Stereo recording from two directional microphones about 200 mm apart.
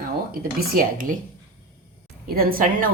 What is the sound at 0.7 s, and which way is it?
Speech, 45° right (ahead or behind).